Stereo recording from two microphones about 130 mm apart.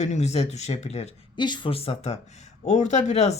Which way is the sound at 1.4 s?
35° left (ahead or behind).